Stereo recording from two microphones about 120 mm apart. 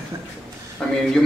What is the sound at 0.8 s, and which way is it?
Speech, 5° left (ahead or behind).